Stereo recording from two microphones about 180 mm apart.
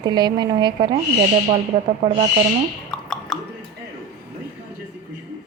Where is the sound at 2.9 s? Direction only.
5° left (ahead or behind).